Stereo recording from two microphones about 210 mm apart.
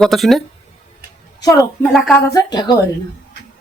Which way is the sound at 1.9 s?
Centre (ahead or behind).